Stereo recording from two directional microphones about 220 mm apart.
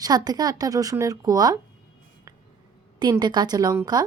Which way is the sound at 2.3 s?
15° right (ahead or behind).